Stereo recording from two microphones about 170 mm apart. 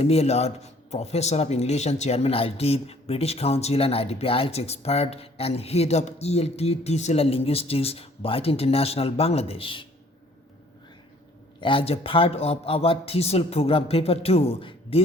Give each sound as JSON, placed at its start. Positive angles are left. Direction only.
{"t": 0.0, "sound": "speech", "side_deg": 40}
{"t": 11.6, "sound": "speech", "side_deg": 30}